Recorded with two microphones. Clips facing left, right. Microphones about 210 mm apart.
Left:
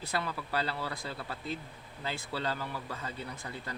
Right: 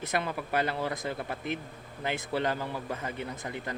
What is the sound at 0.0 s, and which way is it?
Speech, 20° right (ahead or behind).